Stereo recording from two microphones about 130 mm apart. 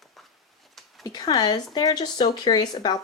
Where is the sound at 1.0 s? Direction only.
30° left (ahead or behind).